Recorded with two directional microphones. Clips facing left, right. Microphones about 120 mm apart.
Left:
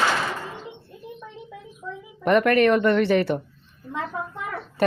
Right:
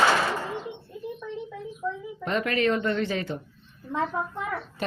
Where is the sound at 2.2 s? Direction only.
65° left (ahead or behind).